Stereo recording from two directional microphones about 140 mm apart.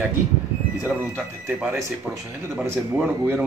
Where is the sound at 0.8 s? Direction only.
15° right (ahead or behind).